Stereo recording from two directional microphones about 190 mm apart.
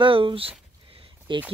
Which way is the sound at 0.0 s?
25° right (ahead or behind).